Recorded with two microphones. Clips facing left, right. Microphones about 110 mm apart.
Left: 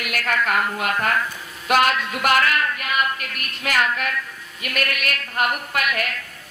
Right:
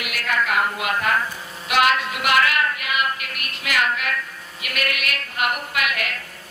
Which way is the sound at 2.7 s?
40° left (ahead or behind).